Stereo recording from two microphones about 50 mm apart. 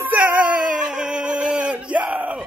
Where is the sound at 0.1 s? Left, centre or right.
Right.